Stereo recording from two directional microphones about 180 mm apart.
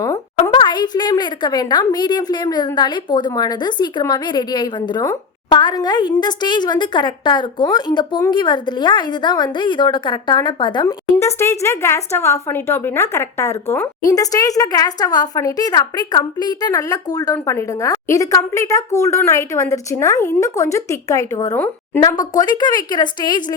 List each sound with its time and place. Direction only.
0.0 s a woman's voice: 15° left (ahead or behind)